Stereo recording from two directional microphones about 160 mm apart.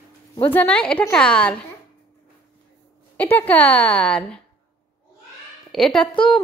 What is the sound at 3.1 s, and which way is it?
A woman's voice, 10° left (ahead or behind).